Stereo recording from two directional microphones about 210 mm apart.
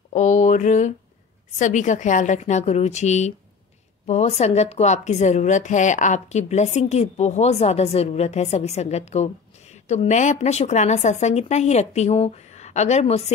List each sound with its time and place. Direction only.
0.1 s a woman's voice: 35° left (ahead or behind)